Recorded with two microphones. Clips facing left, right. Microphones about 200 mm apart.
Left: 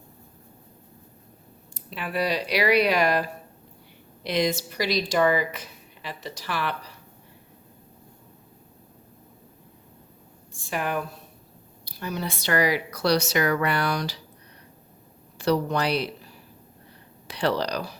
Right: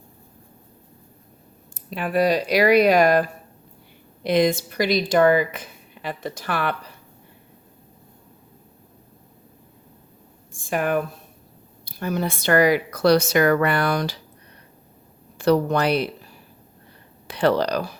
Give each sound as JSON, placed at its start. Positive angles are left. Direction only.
{"t": 1.7, "sound": "speech", "side_deg": -45}
{"t": 10.6, "sound": "speech", "side_deg": -50}
{"t": 15.4, "sound": "speech", "side_deg": -50}
{"t": 17.2, "sound": "speech", "side_deg": -55}